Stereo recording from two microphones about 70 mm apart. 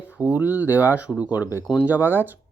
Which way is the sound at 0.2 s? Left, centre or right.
Right.